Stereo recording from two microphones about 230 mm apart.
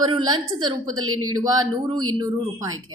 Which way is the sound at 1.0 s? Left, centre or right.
Right.